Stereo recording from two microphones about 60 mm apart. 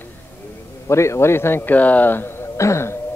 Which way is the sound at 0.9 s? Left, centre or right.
Left.